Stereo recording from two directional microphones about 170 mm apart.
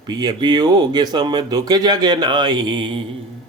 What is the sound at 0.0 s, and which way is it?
Speech, 25° right (ahead or behind).